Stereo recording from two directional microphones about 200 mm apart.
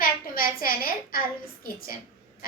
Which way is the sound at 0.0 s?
45° left (ahead or behind).